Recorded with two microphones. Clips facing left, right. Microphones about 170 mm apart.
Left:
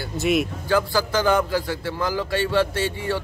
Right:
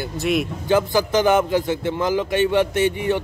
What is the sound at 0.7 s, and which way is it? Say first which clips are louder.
A man's voice: right 4 dB; 20° right (ahead or behind).